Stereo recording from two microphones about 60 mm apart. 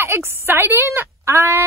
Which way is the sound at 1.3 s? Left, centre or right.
Right.